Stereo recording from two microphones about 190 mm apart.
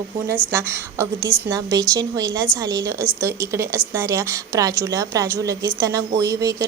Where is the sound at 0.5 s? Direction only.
15° right (ahead or behind).